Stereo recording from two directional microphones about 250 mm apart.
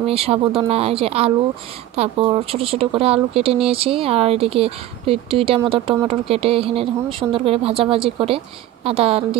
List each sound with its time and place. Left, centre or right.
0.0 s speech: right